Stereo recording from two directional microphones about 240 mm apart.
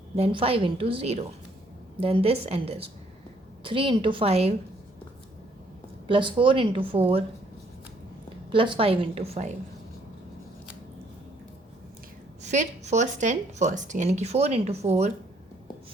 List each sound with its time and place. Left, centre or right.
0.2 s speech: right
6.1 s speech: right
8.4 s speech: centre
12.4 s speech: right